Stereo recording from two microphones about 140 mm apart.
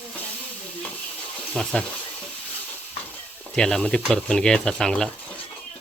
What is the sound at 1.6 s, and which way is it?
Cutlery, 5° left (ahead or behind).